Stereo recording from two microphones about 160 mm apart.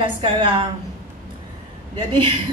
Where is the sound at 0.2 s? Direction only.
30° right (ahead or behind).